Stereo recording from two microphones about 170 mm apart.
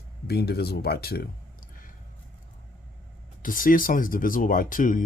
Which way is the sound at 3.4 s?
55° left (ahead or behind).